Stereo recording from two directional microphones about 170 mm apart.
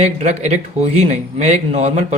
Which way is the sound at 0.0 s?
40° right (ahead or behind).